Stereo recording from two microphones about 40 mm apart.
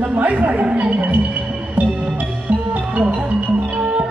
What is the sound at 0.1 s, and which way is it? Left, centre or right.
Speech, right.